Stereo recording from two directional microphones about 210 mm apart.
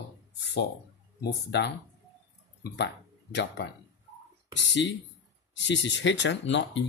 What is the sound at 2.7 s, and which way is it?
Speech, 55° left (ahead or behind).